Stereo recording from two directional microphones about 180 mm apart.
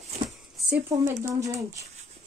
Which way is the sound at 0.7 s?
15° right (ahead or behind).